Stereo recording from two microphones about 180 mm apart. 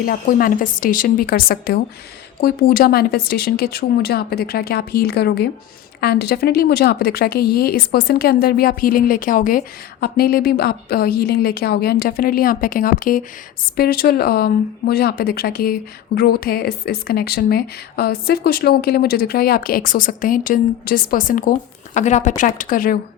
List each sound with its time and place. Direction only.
0.0 s a woman's voice: 55° left (ahead or behind)